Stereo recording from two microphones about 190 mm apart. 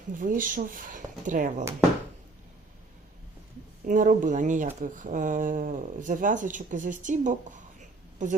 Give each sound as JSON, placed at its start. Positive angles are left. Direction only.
{"t": 0.1, "sound": "speech", "side_deg": -45}
{"t": 3.8, "sound": "speech", "side_deg": -45}